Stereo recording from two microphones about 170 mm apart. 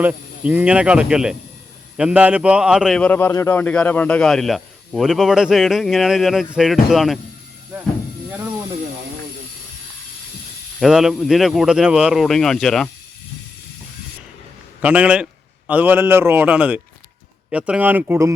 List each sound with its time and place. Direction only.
0.0 s speech: 10° right (ahead or behind)
3.0 s speech: 10° left (ahead or behind)
10.8 s speech: centre (ahead or behind)
14.8 s a man's voice: 10° right (ahead or behind)